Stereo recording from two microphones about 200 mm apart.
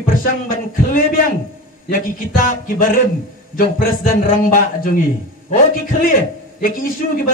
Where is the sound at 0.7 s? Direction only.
40° left (ahead or behind).